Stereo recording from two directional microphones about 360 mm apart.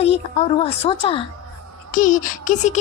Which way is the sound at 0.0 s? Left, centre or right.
Centre.